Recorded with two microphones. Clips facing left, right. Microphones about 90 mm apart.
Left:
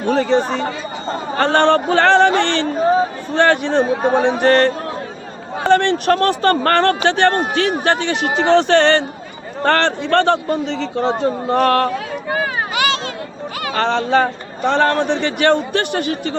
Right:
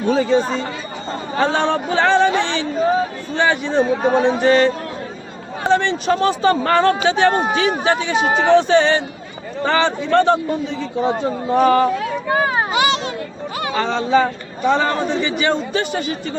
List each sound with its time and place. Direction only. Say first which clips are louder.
0.0 s a man's voice: even; 60° left (ahead or behind)
12.3 s a sound: right 3 dB; 25° right (ahead or behind)
13.7 s speech: left 1 dB; 65° left (ahead or behind)